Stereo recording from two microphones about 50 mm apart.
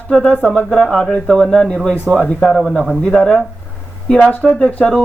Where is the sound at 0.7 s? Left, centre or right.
Centre.